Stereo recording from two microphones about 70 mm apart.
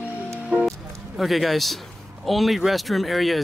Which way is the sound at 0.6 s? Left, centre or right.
Centre.